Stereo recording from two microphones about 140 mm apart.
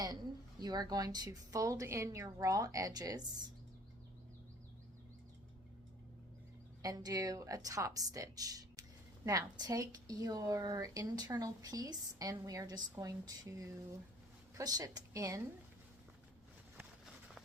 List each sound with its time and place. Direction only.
0.6 s a woman's voice: 30° right (ahead or behind)
6.8 s a woman's voice: 25° right (ahead or behind)